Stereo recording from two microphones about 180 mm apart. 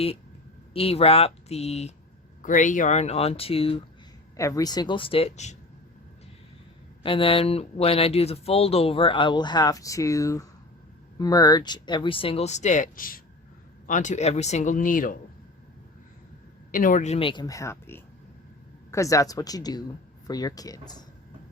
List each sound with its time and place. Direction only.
0.7 s speech: 35° left (ahead or behind)
4.4 s speech: 20° left (ahead or behind); by 5.5 s 35° left (ahead or behind)
7.0 s speech: 30° left (ahead or behind); by 15.1 s 50° left (ahead or behind)
16.7 s speech: 50° left (ahead or behind); by 21.0 s 20° left (ahead or behind)